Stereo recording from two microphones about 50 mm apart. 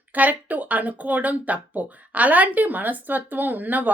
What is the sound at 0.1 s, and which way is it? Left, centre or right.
Speech, right.